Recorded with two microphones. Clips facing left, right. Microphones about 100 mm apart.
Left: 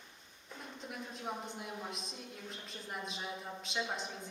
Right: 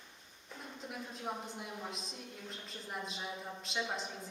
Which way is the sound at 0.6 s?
Centre (ahead or behind).